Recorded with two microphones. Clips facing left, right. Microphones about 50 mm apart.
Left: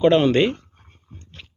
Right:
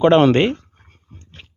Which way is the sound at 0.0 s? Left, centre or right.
Right.